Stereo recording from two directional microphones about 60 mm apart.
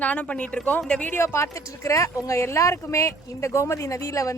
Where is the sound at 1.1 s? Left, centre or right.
Left.